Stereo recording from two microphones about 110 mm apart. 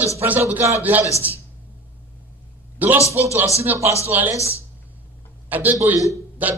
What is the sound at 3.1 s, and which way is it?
Speech, 70° right (ahead or behind).